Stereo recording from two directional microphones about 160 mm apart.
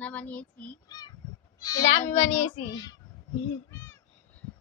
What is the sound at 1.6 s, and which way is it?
Speech, 25° left (ahead or behind).